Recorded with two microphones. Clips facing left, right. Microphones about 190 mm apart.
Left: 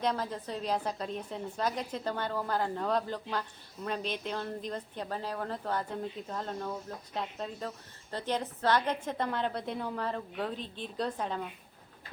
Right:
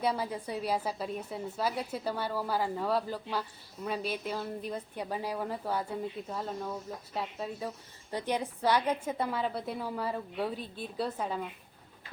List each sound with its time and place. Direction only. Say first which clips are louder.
0.0 s speech: right 1 dB; 10° right (ahead or behind)